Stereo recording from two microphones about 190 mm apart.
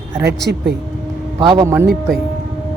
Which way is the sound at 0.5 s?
60° right (ahead or behind).